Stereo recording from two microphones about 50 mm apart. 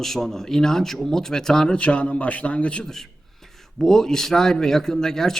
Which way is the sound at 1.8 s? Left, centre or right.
Left.